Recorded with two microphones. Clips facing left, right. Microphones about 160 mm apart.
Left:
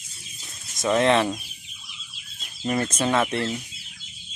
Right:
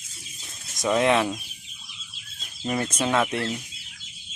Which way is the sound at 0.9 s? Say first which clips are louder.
Left 1 dB; 10° right (ahead or behind).